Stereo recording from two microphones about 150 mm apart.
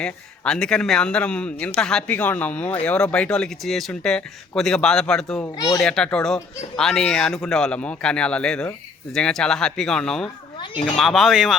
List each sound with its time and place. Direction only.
0.0 s a man's voice: 5° left (ahead or behind)
5.5 s a child's voice: 25° left (ahead or behind)
5.8 s speech: 5° left (ahead or behind)
10.6 s a sound: 40° left (ahead or behind)
10.9 s speech: centre (ahead or behind)